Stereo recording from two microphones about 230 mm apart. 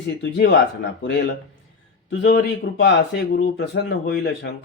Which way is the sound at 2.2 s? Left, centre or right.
Left.